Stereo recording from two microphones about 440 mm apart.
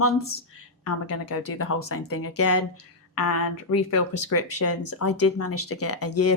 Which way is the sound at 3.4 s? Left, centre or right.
Left.